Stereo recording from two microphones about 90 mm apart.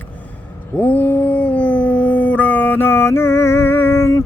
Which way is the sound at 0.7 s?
15° left (ahead or behind).